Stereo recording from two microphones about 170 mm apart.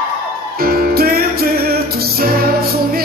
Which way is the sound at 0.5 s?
60° right (ahead or behind).